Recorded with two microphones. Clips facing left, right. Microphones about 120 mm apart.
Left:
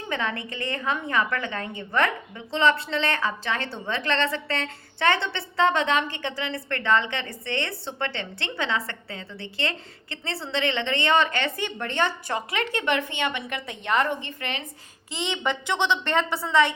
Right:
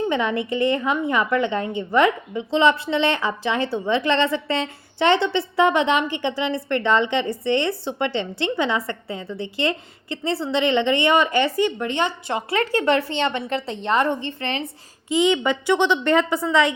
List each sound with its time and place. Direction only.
0.1 s a woman's voice: 15° right (ahead or behind)
12.5 s a woman's voice: 30° right (ahead or behind)
15.6 s a woman's voice: 10° right (ahead or behind)